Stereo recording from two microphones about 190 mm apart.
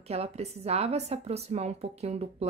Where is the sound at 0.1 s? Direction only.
35° right (ahead or behind).